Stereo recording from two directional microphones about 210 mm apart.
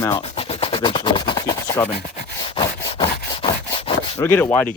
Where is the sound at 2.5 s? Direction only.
25° left (ahead or behind).